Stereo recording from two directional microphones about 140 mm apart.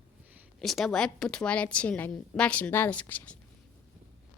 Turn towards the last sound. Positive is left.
turn(degrees=15)  # may be behind; listen again after turning